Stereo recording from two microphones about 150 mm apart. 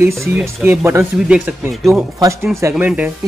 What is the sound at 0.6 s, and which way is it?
Speech, 15° right (ahead or behind).